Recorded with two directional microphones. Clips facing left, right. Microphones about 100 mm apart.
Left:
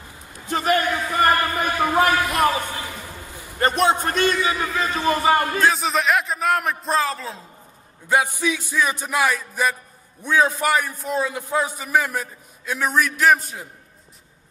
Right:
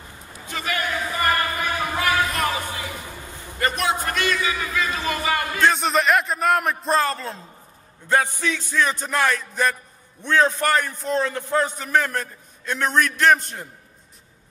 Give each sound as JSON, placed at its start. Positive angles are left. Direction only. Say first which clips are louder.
{"t": 0.5, "sound": "a sound", "louder": "left 7 dB", "side_deg": 40}
{"t": 3.5, "sound": "a man's voice", "louder": "left 4 dB", "side_deg": 35}
{"t": 5.6, "sound": "a man's voice", "louder": "even", "side_deg": 0}
{"t": 8.1, "sound": "a man's voice", "louder": "left 1 dB", "side_deg": 10}